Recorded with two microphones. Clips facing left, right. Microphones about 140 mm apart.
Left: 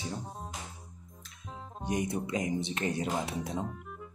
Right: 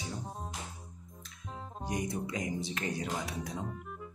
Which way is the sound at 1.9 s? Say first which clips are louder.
Left 4 dB; 25° left (ahead or behind).